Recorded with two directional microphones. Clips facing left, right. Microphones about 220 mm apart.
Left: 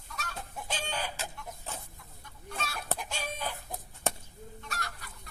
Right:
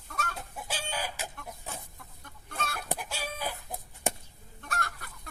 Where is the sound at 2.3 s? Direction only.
50° right (ahead or behind).